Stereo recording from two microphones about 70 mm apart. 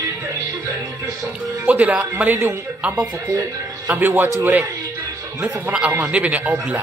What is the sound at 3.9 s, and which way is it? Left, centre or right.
Speech, right.